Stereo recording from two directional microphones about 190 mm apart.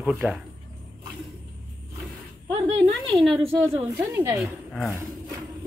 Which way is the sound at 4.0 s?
5° right (ahead or behind).